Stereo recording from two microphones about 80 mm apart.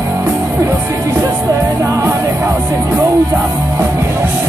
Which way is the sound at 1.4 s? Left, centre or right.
Right.